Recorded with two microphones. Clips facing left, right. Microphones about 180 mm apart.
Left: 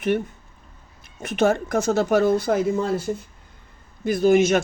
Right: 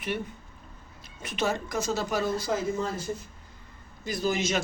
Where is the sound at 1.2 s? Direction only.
55° left (ahead or behind).